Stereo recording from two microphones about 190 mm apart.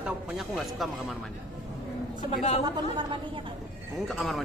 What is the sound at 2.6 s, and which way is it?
Speech, 25° right (ahead or behind).